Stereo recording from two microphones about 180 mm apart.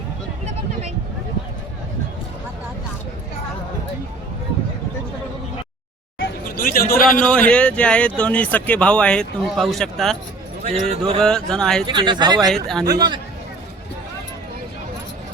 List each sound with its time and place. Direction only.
6.6 s a man's voice: 55° left (ahead or behind)
7.3 s speech: 5° left (ahead or behind)
10.6 s speech: 35° right (ahead or behind)
11.2 s speech: 5° left (ahead or behind)
11.9 s speech: 25° right (ahead or behind)
12.5 s speech: centre (ahead or behind)
12.8 s speech: 20° right (ahead or behind)